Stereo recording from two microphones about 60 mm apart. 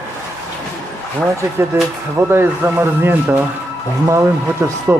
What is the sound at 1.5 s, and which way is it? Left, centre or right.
Speech, right.